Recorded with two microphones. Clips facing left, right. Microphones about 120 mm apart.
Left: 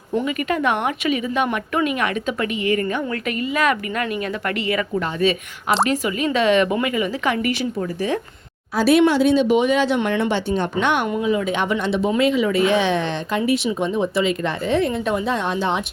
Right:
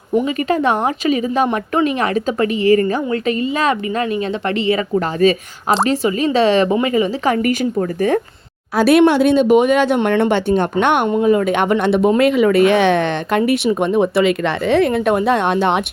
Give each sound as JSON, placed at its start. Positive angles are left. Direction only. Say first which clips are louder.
{"t": 0.3, "sound": "a woman's voice", "louder": "right 4 dB", "side_deg": -30}
{"t": 4.9, "sound": "a woman's voice", "louder": "right 7 dB", "side_deg": -40}
{"t": 8.7, "sound": "speech", "louder": "right 4 dB", "side_deg": -65}